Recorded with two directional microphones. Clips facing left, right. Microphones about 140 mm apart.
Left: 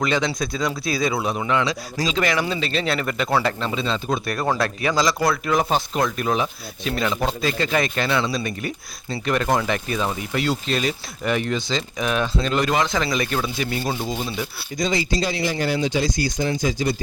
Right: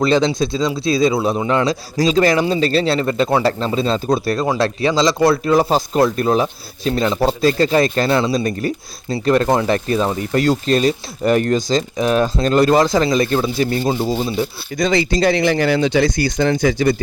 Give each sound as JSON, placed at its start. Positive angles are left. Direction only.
{"t": 0.0, "sound": "speech", "side_deg": -30}
{"t": 4.4, "sound": "speech", "side_deg": -25}
{"t": 14.8, "sound": "speech", "side_deg": -65}